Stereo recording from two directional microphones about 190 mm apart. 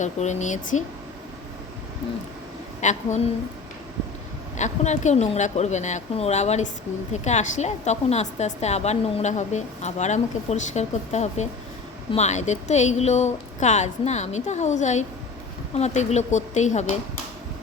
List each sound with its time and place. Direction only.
0.0 s a woman's voice: 40° left (ahead or behind)
2.8 s a woman's voice: 40° left (ahead or behind)
4.5 s a woman's voice: 40° left (ahead or behind)